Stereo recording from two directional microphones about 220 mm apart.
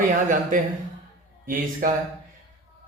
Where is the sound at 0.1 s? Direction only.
35° right (ahead or behind).